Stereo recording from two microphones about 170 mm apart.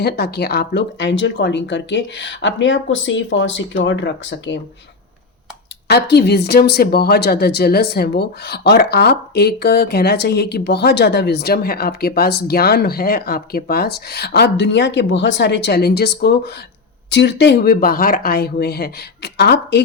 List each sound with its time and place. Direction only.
0.0 s speech: 70° left (ahead or behind); by 4.6 s 90° left
5.9 s speech: 75° left (ahead or behind)
17.1 s speech: 90° left